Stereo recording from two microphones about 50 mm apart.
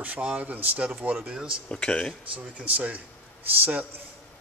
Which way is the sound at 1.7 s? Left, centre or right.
Centre.